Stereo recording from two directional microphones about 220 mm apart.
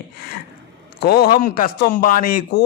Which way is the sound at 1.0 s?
45° left (ahead or behind).